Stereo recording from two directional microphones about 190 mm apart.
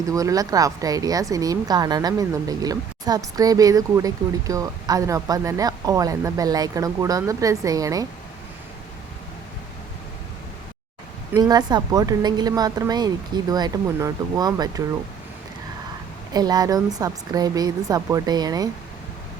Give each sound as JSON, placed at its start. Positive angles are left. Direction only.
{"t": 0.0, "sound": "speech", "side_deg": -15}
{"t": 11.3, "sound": "speech", "side_deg": -20}
{"t": 16.3, "sound": "speech", "side_deg": -20}